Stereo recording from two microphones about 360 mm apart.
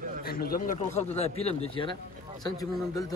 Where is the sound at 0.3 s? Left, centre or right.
Left.